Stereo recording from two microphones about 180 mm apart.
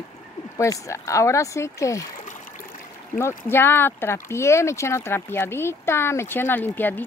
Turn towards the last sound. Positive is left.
turn(degrees=10)  # may be behind; listen again after turning